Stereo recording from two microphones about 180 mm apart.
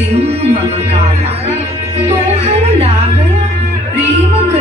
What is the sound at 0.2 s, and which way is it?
Music, 35° right (ahead or behind).